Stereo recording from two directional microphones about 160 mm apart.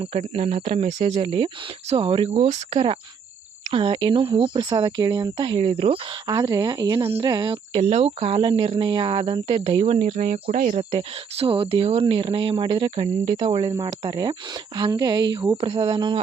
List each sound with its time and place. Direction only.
0.0 s speech: 40° right (ahead or behind)
6.2 s speech: 25° right (ahead or behind); by 10.8 s 55° right (ahead or behind)
10.9 s speech: 35° right (ahead or behind)